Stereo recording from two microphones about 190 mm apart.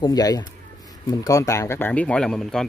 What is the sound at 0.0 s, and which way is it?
Speech, 20° left (ahead or behind).